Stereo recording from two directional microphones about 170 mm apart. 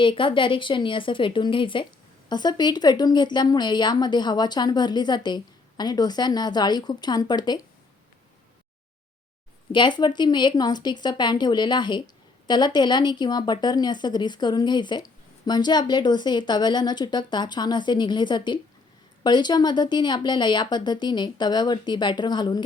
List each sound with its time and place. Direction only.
0.0 s speech: 30° left (ahead or behind)
9.7 s speech: 25° left (ahead or behind)